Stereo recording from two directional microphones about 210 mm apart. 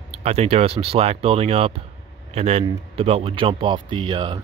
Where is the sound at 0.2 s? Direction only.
30° right (ahead or behind).